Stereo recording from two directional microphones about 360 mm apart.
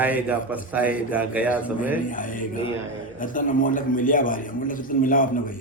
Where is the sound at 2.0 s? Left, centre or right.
Left.